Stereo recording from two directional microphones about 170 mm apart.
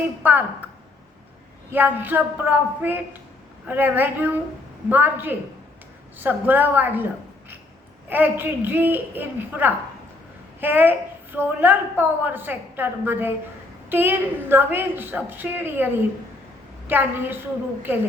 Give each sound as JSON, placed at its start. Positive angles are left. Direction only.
{"t": 0.2, "sound": "a woman's voice", "side_deg": -10}
{"t": 1.7, "sound": "a woman's voice", "side_deg": -10}
{"t": 8.1, "sound": "a woman's voice", "side_deg": -10}